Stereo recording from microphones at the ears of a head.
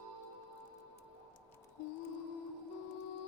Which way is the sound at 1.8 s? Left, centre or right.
Left.